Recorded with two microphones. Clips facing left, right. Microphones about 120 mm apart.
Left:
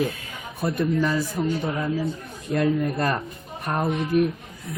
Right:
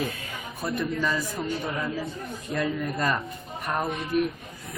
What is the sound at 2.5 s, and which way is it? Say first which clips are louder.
Speech: left 6 dB; 45° left (ahead or behind).